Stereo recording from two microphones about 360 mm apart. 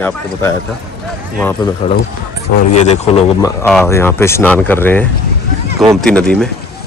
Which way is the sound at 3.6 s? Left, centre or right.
Centre.